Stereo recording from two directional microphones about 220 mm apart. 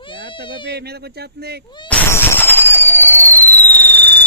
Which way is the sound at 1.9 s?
10° left (ahead or behind).